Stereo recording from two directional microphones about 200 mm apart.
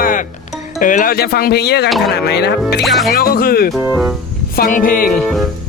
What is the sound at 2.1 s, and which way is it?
Speech, 55° left (ahead or behind).